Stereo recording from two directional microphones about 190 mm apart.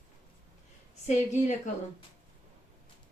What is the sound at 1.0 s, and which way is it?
Speech, 35° left (ahead or behind).